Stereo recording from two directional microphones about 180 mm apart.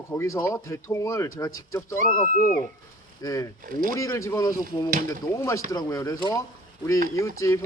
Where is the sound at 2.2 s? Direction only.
45° left (ahead or behind).